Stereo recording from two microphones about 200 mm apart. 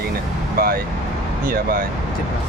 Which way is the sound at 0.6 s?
50° right (ahead or behind).